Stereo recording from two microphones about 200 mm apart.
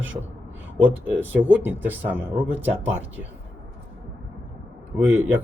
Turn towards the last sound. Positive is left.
turn(degrees=-10)  # may be behind; listen again after turning